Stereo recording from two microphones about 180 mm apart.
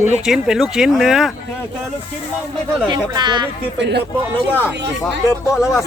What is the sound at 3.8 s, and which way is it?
Speech, 70° right (ahead or behind).